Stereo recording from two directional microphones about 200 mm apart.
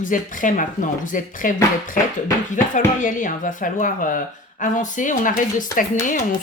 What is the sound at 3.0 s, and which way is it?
Speech, 40° left (ahead or behind).